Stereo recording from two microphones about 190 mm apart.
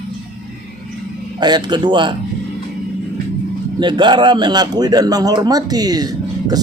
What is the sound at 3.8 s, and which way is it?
A man's voice, 25° right (ahead or behind).